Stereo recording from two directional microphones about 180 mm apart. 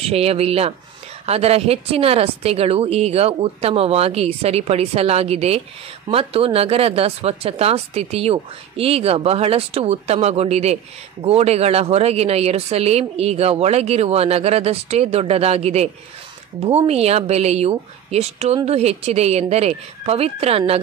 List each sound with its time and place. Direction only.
0.0 s speech: 35° right (ahead or behind)